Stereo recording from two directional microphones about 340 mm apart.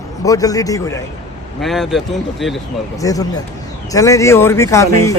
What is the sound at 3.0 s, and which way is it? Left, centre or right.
A man's voice, centre.